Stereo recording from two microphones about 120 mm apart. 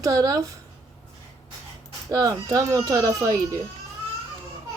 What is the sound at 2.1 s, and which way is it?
Speech, 30° right (ahead or behind).